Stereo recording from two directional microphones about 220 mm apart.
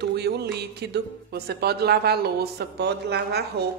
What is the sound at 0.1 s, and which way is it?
A woman's voice, 50° right (ahead or behind).